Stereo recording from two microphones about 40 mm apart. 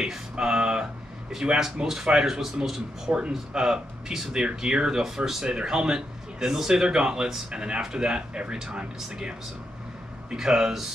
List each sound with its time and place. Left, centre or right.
0.0 s a sound: centre
1.6 s speech: centre
10.3 s speech: centre